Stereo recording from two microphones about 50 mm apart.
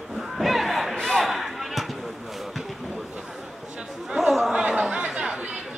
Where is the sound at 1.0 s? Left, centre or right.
Centre.